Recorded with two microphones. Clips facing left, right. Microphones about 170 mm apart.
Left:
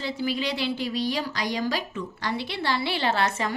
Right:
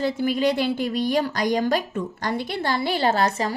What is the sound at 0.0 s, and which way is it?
A woman's voice, 50° right (ahead or behind).